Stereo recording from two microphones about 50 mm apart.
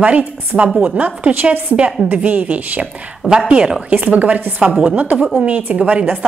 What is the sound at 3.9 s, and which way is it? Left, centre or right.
A woman's voice, right.